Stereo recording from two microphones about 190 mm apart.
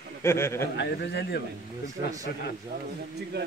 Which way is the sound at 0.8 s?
60° left (ahead or behind).